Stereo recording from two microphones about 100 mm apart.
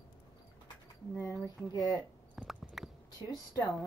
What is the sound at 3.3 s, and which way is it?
Speech, 40° left (ahead or behind).